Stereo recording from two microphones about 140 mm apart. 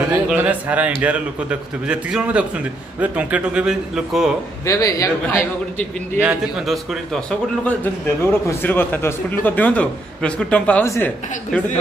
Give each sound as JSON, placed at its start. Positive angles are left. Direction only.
{"t": 0.1, "sound": "a man's voice", "side_deg": -10}
{"t": 4.6, "sound": "a man's voice", "side_deg": 25}
{"t": 6.1, "sound": "a man's voice", "side_deg": -5}